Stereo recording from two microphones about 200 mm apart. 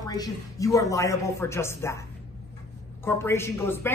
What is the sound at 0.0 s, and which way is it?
A man's voice, 20° left (ahead or behind).